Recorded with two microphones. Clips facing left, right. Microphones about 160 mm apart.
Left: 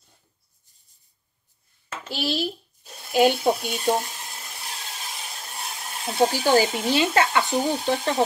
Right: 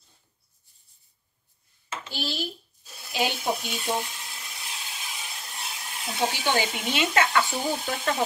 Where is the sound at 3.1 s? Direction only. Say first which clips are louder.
Left 8 dB; 45° left (ahead or behind).